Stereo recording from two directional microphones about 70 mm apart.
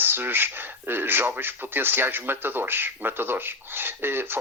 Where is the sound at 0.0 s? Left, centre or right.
Right.